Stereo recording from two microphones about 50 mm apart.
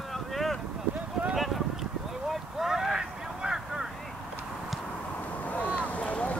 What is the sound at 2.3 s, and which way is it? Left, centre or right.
Vehicle, centre.